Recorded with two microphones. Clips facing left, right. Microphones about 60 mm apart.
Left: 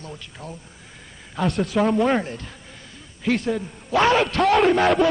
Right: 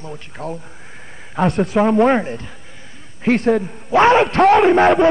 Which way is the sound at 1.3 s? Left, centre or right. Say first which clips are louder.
Right 5 dB; right.